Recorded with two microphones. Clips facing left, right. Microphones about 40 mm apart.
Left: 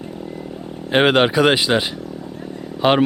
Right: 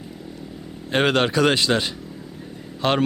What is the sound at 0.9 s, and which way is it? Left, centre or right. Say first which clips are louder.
Speech: left 5 dB; centre.